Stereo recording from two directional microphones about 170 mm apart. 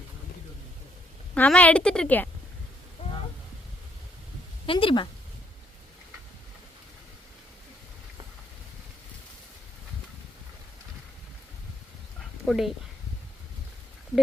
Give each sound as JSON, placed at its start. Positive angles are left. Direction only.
{"t": 1.4, "sound": "a woman's voice", "side_deg": 10}
{"t": 4.6, "sound": "speech", "side_deg": 30}
{"t": 12.5, "sound": "speech", "side_deg": 0}